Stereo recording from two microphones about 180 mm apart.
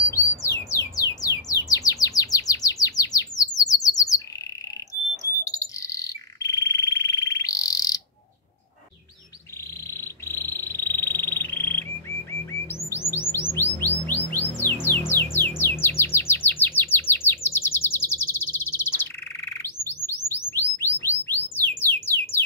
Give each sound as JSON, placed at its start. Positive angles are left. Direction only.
{"t": 0.1, "sound": "squawk", "side_deg": 15}
{"t": 1.5, "sound": "chirp", "side_deg": 20}
{"t": 5.2, "sound": "bird", "side_deg": 20}
{"t": 9.9, "sound": "insect", "side_deg": 15}
{"t": 13.3, "sound": "music", "side_deg": 10}
{"t": 17.1, "sound": "chirp", "side_deg": 15}
{"t": 20.2, "sound": "bird", "side_deg": 10}
{"t": 21.5, "sound": "music", "side_deg": 10}